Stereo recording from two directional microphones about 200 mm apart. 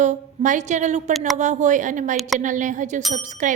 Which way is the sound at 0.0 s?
40° right (ahead or behind).